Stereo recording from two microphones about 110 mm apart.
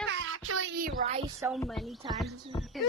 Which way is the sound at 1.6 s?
5° left (ahead or behind).